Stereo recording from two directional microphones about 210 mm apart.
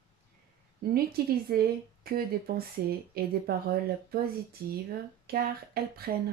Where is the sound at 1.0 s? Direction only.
45° right (ahead or behind).